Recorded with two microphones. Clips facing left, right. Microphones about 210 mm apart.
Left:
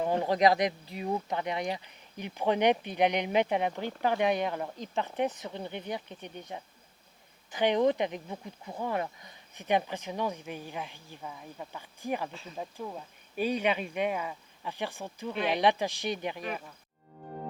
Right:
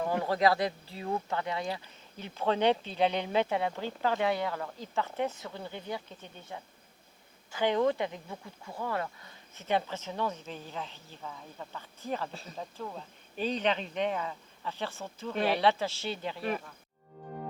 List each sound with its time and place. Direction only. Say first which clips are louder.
0.0 s speech: left 2 dB; 20° left (ahead or behind)